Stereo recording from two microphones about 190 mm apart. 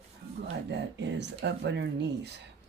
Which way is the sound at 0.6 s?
65° right (ahead or behind).